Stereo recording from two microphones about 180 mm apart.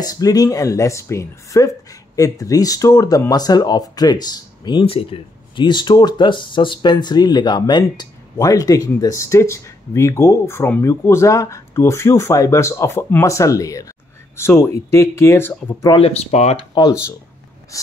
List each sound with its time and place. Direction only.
0.0 s speech: 20° left (ahead or behind)
15.9 s speech: 35° left (ahead or behind)
16.7 s speech: 20° left (ahead or behind)